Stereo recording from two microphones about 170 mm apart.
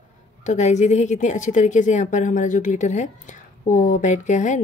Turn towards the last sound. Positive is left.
turn(degrees=45)  # may be behind; listen again after turning